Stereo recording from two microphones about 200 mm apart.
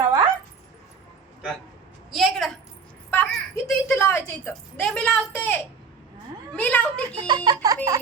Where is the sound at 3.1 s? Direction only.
10° left (ahead or behind).